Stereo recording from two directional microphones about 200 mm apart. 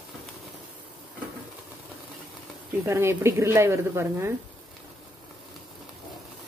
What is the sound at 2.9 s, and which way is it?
Speech, 15° right (ahead or behind).